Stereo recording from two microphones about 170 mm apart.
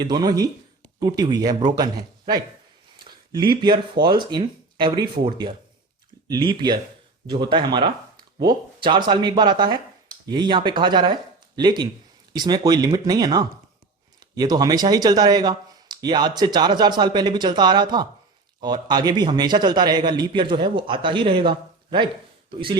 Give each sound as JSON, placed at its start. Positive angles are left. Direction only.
{"t": 0.0, "sound": "speech", "side_deg": -25}
{"t": 3.0, "sound": "a sound", "side_deg": -25}
{"t": 3.6, "sound": "speech", "side_deg": -25}